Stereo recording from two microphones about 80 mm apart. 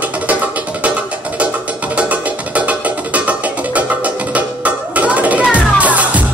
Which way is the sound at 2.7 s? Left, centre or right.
Centre.